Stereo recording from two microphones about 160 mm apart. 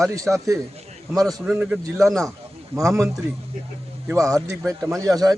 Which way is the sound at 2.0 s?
5° left (ahead or behind).